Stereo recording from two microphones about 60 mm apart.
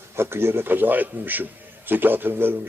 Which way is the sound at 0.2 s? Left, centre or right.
Right.